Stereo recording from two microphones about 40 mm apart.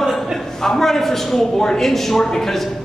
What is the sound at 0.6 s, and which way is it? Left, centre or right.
A man's voice, centre.